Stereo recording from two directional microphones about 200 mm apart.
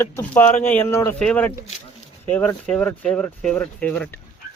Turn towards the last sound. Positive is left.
turn(degrees=10)  # may be behind; listen again after turning